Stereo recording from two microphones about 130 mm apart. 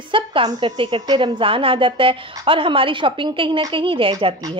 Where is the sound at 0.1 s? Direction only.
40° right (ahead or behind).